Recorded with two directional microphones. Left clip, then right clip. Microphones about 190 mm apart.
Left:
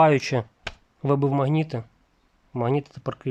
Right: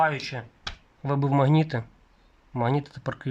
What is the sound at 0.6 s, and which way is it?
Speech, 15° left (ahead or behind).